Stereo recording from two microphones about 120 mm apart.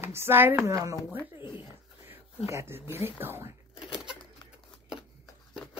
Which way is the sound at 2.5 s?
20° right (ahead or behind).